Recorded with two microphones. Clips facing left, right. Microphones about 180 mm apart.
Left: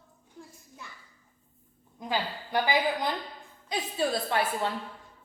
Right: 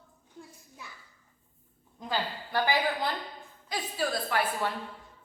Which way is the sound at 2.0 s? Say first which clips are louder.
Left 1 dB; 15° left (ahead or behind).